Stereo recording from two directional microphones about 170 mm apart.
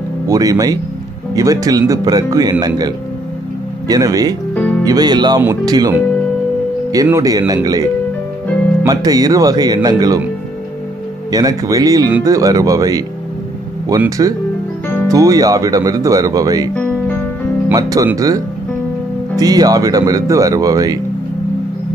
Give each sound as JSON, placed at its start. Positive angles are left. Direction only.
{"t": 0.3, "sound": "speech", "side_deg": -20}
{"t": 3.8, "sound": "speech", "side_deg": -20}
{"t": 11.3, "sound": "speech", "side_deg": -20}
{"t": 16.7, "sound": "music", "side_deg": 10}
{"t": 17.6, "sound": "speech", "side_deg": -20}